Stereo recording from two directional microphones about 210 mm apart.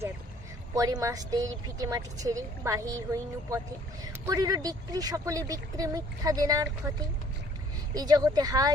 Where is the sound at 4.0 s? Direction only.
15° right (ahead or behind).